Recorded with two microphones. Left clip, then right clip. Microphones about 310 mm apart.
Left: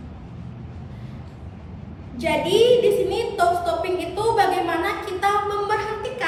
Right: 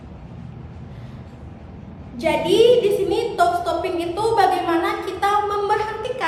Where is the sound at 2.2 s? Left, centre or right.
Centre.